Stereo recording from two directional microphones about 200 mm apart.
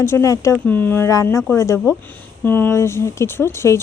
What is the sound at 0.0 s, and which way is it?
Speech, 15° left (ahead or behind).